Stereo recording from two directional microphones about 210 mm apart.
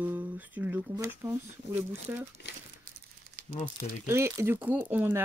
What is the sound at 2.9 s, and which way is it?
Crumpling, 45° right (ahead or behind).